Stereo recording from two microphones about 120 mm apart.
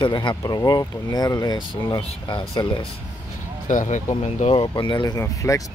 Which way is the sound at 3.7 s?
90° left.